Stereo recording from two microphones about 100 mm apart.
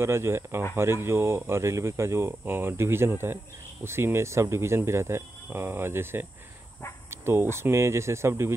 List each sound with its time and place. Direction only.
0.0 s speech: 25° right (ahead or behind)